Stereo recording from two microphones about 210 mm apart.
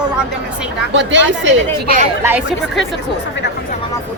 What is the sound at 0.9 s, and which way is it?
Speech, 60° right (ahead or behind).